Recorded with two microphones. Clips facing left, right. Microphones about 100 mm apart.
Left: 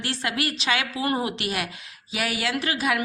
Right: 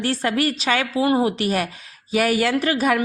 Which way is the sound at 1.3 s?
40° right (ahead or behind).